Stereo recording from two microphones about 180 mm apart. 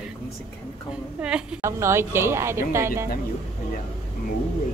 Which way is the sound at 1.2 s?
5° right (ahead or behind).